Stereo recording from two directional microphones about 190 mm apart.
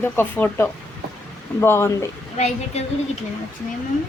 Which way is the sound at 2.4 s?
35° left (ahead or behind).